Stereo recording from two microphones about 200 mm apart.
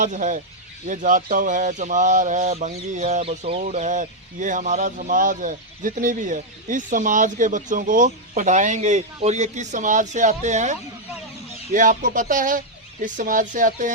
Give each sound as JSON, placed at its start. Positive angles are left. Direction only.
{"t": 0.0, "sound": "speech", "side_deg": -40}